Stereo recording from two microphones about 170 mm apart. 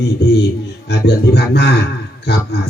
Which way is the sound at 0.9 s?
80° left.